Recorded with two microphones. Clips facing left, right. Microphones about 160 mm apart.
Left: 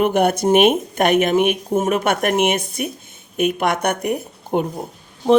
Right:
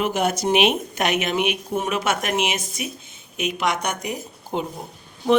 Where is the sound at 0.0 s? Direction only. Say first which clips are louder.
Left 6 dB; 55° left (ahead or behind).